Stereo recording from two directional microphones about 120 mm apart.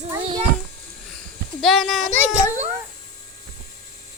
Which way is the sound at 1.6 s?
Centre (ahead or behind).